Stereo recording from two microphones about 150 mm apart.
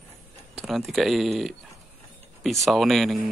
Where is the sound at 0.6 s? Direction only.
Centre (ahead or behind).